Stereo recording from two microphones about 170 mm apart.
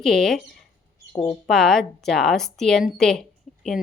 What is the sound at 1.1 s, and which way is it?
Speech, 30° left (ahead or behind).